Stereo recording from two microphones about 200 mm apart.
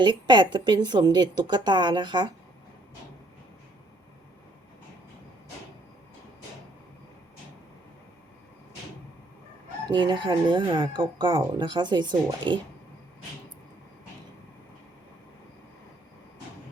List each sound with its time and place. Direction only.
0.0 s speech: 25° right (ahead or behind)
9.9 s speech: 25° right (ahead or behind)